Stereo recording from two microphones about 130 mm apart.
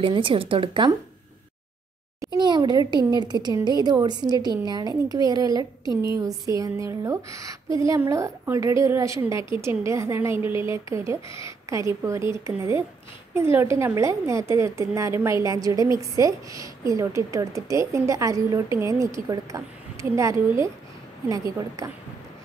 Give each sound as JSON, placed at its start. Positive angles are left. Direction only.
{"t": 0.0, "sound": "speech", "side_deg": -40}
{"t": 2.3, "sound": "a woman's voice", "side_deg": -35}